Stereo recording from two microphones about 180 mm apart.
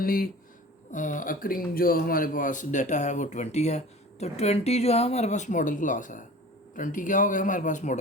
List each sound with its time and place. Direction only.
0.0 s speech: 55° left (ahead or behind)